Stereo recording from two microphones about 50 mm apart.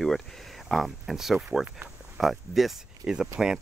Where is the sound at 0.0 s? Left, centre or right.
Centre.